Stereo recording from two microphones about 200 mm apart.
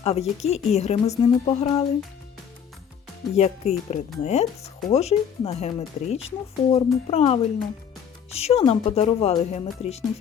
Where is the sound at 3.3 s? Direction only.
35° left (ahead or behind).